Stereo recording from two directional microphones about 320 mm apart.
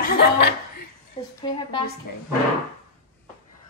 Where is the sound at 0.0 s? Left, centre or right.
Left.